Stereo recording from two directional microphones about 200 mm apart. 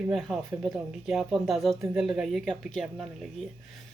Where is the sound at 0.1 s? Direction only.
Centre (ahead or behind).